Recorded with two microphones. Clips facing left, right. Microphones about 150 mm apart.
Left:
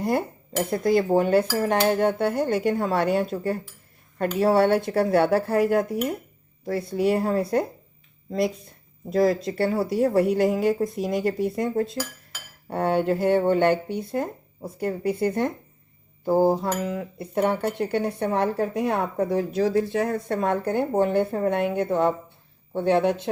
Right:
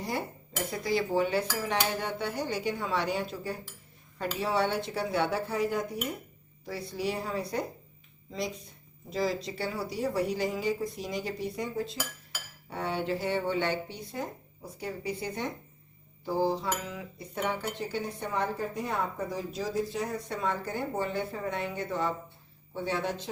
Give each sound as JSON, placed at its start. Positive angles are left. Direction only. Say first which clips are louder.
{"t": 0.0, "sound": "dishes", "louder": "left 9 dB", "side_deg": 55}
{"t": 1.5, "sound": "speech", "louder": "left 10 dB", "side_deg": 55}